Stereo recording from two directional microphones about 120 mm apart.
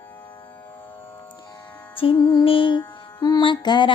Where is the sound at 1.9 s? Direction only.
40° left (ahead or behind).